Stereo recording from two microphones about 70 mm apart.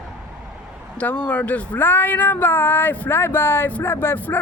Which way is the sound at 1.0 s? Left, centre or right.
Left.